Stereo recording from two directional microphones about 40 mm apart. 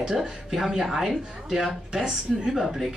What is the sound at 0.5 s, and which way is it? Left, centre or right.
A woman's voice, centre.